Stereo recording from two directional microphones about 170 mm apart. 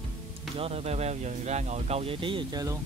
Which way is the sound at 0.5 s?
35° right (ahead or behind).